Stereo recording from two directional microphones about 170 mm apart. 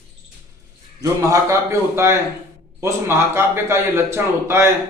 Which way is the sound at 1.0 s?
20° right (ahead or behind).